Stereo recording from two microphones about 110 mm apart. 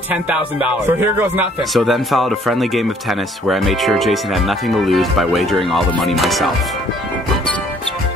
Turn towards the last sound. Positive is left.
turn(degrees=0)  # may be behind; listen again after turning